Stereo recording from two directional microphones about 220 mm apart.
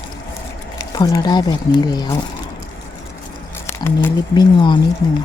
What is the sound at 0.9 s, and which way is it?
Speech, 15° left (ahead or behind).